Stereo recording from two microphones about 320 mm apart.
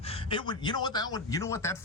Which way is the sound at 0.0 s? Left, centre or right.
Centre.